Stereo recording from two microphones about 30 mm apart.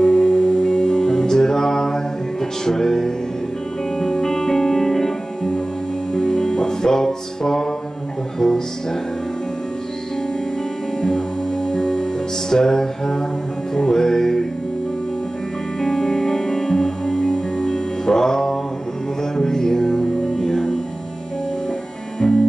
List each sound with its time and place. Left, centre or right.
0.0 s music: left; by 5.5 s centre
6.1 s music: left
11.0 s music: left
15.8 s music: centre
22.2 s music: centre